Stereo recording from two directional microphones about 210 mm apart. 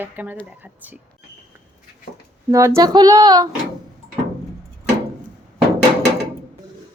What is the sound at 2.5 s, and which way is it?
A woman's voice, 15° right (ahead or behind).